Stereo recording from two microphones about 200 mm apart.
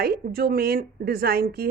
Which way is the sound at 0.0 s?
50° right (ahead or behind).